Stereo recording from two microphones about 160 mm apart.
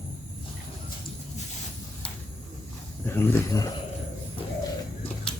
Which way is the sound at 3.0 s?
15° left (ahead or behind).